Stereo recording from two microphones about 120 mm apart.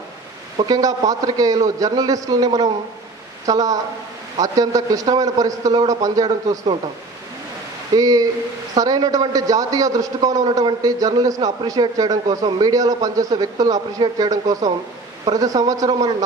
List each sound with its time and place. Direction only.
0.7 s a man's voice: 30° right (ahead or behind)
7.9 s a man's voice: 30° right (ahead or behind)